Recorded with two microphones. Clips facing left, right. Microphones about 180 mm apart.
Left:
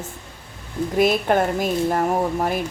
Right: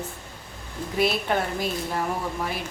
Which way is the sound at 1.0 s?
50° left (ahead or behind).